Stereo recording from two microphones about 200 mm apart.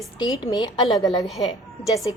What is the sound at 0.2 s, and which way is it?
A woman's voice, 20° left (ahead or behind).